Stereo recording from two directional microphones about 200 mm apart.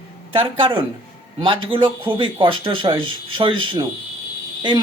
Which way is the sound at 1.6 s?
25° right (ahead or behind).